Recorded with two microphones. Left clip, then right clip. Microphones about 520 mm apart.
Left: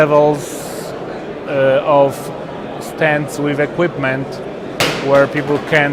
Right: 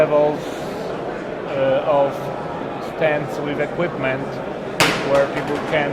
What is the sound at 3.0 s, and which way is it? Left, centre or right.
A man's voice, left.